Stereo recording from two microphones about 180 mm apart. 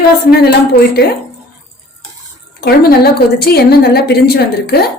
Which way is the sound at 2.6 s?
60° left (ahead or behind).